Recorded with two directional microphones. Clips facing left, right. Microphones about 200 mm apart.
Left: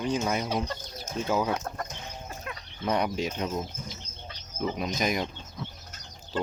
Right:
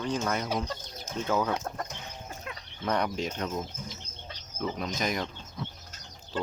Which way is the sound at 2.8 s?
10° left (ahead or behind).